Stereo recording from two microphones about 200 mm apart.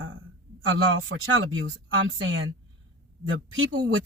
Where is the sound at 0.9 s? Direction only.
70° right (ahead or behind).